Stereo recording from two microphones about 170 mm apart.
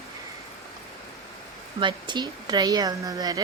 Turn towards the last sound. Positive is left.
turn(degrees=-20)  # may be behind; listen again after turning